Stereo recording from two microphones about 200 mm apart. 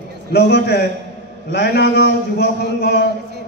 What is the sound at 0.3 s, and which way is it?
A man's voice, 55° left (ahead or behind).